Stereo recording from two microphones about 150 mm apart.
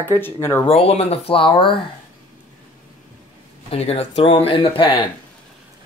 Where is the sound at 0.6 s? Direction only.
40° left (ahead or behind).